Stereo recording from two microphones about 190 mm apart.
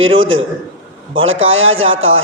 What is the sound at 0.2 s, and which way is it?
A man's voice, 90° right.